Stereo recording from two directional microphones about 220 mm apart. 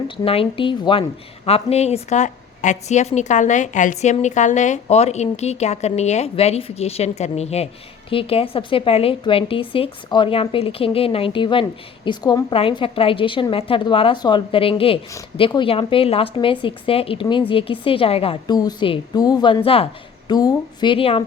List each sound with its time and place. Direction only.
0.3 s a woman's voice: 25° left (ahead or behind)